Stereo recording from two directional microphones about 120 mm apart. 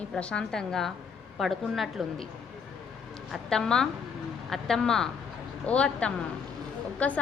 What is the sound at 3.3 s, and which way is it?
A woman's voice, 5° left (ahead or behind).